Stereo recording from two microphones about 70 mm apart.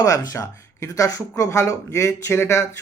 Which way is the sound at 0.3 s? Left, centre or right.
Left.